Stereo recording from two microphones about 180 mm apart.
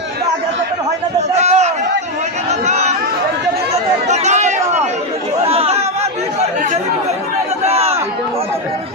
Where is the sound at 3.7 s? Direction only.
40° right (ahead or behind).